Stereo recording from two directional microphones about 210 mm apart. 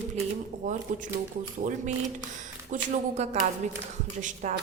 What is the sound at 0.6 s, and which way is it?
A woman's voice, 40° right (ahead or behind).